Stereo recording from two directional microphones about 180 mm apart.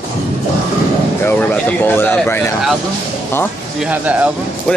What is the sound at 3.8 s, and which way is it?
Speech, 10° right (ahead or behind).